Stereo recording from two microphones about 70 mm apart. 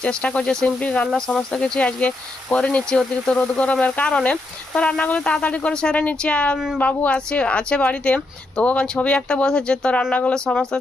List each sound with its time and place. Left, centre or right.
0.0 s speech: centre